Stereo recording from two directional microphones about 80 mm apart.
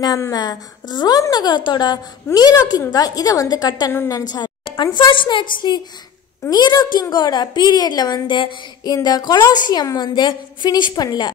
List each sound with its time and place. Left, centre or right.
0.0 s a woman's voice: left
2.9 s a woman's voice: left
4.9 s a woman's voice: left
6.5 s a woman's voice: left
8.8 s a woman's voice: left